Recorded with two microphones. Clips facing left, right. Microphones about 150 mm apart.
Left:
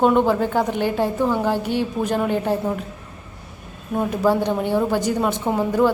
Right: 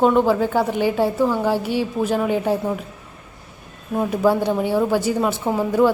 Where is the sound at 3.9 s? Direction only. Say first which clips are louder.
Right 1 dB; 5° right (ahead or behind).